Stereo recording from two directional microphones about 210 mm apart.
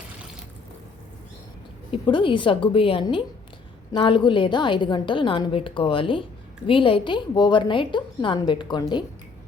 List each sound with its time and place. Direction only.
1.9 s a woman's voice: 25° left (ahead or behind)